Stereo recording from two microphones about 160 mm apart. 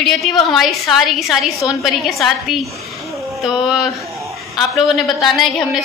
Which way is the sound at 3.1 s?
Centre (ahead or behind).